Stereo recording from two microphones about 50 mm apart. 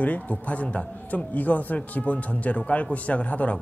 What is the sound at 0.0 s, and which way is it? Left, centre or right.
A man's voice, left.